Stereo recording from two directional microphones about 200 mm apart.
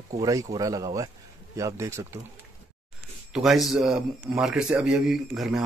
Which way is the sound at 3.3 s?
Centre (ahead or behind).